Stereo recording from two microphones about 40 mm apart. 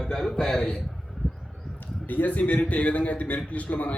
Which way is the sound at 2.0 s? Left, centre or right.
Left.